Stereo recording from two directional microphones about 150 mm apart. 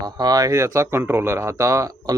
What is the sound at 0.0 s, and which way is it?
Speech, 25° right (ahead or behind).